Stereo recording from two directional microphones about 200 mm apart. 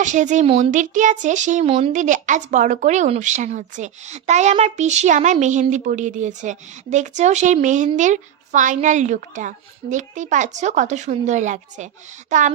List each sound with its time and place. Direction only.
0.0 s speech: 40° right (ahead or behind)